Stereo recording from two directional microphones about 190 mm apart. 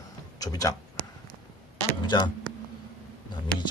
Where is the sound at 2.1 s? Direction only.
25° left (ahead or behind).